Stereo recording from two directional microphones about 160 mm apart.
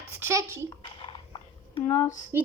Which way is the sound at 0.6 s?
30° left (ahead or behind).